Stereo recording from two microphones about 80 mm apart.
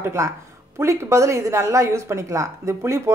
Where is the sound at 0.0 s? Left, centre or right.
Right.